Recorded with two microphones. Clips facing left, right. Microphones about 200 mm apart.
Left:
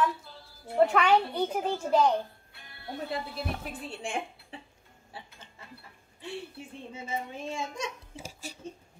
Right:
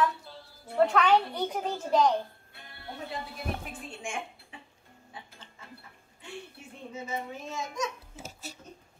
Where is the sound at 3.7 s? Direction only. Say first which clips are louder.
Left 3 dB; 35° left (ahead or behind).